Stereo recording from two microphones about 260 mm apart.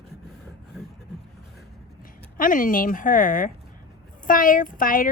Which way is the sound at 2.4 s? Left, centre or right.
Left.